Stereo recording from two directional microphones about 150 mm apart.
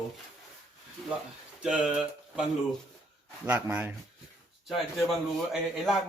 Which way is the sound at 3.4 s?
10° right (ahead or behind).